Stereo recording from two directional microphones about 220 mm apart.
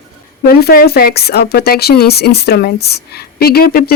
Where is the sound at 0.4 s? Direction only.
45° left (ahead or behind).